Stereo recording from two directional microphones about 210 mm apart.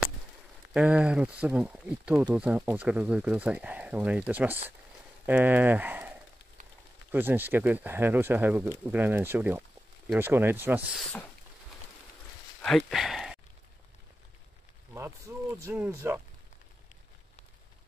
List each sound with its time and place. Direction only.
0.7 s speech: 5° right (ahead or behind)
12.6 s a sound: centre (ahead or behind)
15.0 s speech: 15° right (ahead or behind)